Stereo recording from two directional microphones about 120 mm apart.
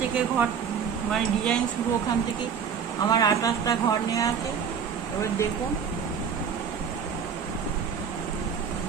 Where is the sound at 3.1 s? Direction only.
30° left (ahead or behind).